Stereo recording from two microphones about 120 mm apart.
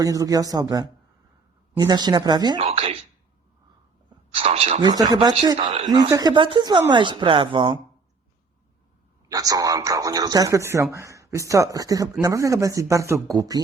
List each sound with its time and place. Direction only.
0.0 s speech: 30° right (ahead or behind)
2.6 s speech: 60° right (ahead or behind)
4.4 s speech: 55° right (ahead or behind)
4.8 s speech: 35° right (ahead or behind)
9.3 s speech: 30° right (ahead or behind)